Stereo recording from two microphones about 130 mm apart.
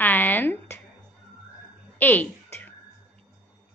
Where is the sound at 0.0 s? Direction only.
15° left (ahead or behind).